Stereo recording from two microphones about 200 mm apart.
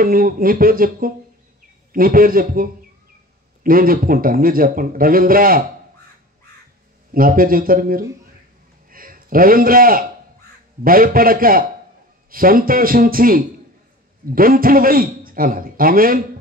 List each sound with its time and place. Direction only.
0.0 s a man's voice: 45° right (ahead or behind)
7.2 s a man's voice: 45° right (ahead or behind)